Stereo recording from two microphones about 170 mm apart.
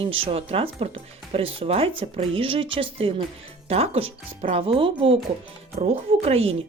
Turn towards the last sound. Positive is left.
turn(degrees=-35)  # may be behind; listen again after turning